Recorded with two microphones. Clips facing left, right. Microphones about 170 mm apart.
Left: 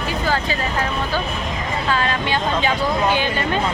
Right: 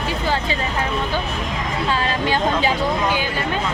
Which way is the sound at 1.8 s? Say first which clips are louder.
Even; 30° right (ahead or behind).